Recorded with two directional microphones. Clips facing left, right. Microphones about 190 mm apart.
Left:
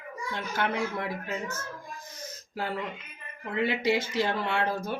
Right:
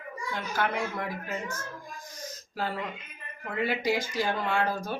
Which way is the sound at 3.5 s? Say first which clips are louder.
Left 2 dB; 25° left (ahead or behind).